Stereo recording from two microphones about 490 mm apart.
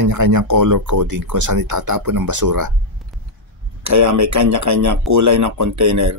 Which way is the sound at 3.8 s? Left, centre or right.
Right.